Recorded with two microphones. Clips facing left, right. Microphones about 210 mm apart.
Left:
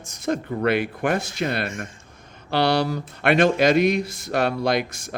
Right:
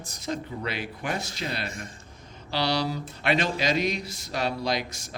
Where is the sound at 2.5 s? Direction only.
55° left (ahead or behind).